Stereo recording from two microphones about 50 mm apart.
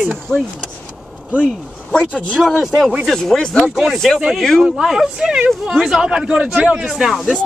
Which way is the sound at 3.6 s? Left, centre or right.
Centre.